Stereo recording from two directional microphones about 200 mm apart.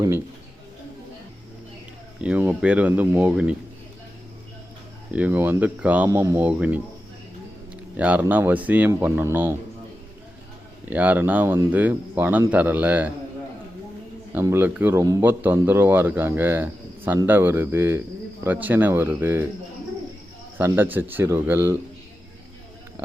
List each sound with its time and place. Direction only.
2.2 s speech: 5° right (ahead or behind)
5.1 s speech: 10° right (ahead or behind)
7.9 s speech: 10° right (ahead or behind)
10.8 s speech: 10° right (ahead or behind)
14.3 s speech: 10° right (ahead or behind)
20.6 s speech: 10° right (ahead or behind)